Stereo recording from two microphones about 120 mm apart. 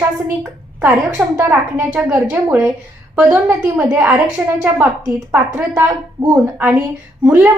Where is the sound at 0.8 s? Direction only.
15° right (ahead or behind).